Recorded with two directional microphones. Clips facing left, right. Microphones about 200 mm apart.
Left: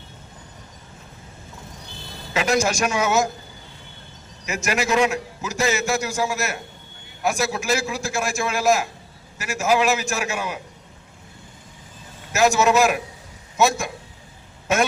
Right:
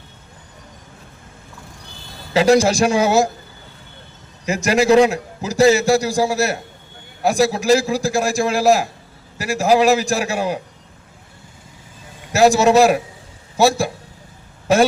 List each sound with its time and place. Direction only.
2.3 s a man's voice: 30° right (ahead or behind)
4.4 s a man's voice: 35° right (ahead or behind)
12.3 s a man's voice: 35° right (ahead or behind)